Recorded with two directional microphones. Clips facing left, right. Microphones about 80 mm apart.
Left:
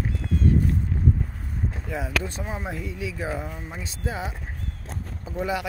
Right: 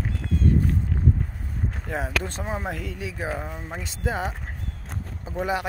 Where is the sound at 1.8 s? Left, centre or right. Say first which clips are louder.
Right 1 dB; right.